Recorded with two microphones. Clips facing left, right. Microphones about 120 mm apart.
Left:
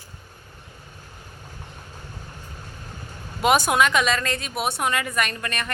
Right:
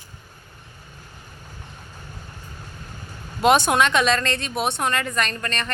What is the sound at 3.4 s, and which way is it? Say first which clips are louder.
A woman's voice: right 2 dB; 5° left (ahead or behind).